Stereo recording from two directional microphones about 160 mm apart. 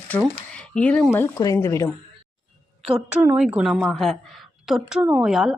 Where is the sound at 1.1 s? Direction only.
20° left (ahead or behind).